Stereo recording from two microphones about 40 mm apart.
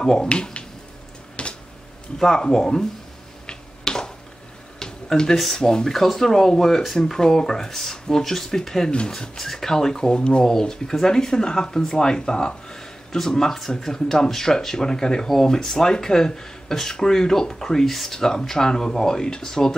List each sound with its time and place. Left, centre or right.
0.0 s speech: centre
1.4 s a sound: left
2.1 s speech: centre
3.4 s finger snapping: centre
4.7 s a sound: centre
5.6 s speech: centre